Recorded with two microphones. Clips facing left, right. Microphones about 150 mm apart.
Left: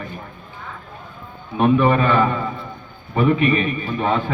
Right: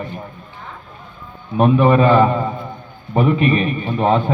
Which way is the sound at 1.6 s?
35° right (ahead or behind).